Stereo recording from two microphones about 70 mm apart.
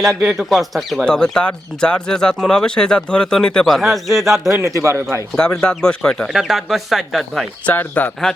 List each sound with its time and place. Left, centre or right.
0.0 s speech: centre
1.0 s speech: centre
4.6 s a man's voice: right
5.5 s speech: centre
6.2 s speech: centre
7.7 s speech: left